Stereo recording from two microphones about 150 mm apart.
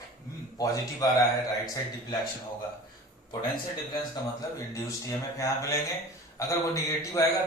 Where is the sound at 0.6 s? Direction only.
20° left (ahead or behind).